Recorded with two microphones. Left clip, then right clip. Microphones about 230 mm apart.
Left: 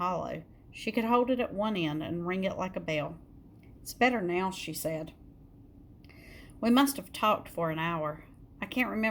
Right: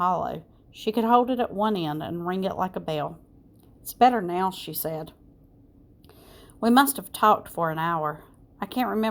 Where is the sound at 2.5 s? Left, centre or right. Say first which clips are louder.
Right 5 dB; right.